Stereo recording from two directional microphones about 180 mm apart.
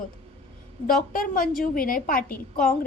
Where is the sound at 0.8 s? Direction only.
50° left (ahead or behind).